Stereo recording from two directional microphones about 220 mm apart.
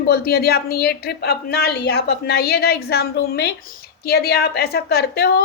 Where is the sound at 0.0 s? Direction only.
45° left (ahead or behind).